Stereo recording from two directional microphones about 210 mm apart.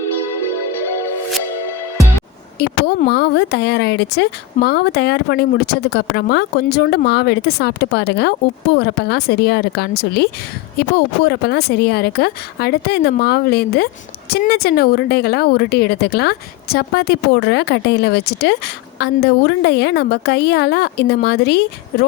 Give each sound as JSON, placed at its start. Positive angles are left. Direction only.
{"t": 2.6, "sound": "speech", "side_deg": 50}